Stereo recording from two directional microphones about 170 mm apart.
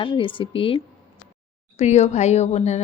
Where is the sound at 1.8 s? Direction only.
40° left (ahead or behind).